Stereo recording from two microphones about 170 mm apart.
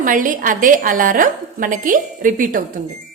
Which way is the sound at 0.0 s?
50° right (ahead or behind).